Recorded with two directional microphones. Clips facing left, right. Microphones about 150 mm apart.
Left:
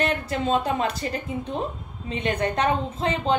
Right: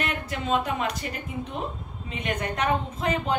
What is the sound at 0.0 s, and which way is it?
A woman's voice, 30° left (ahead or behind).